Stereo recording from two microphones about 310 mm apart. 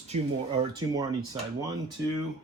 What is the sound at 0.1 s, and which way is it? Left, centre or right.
Speech, centre.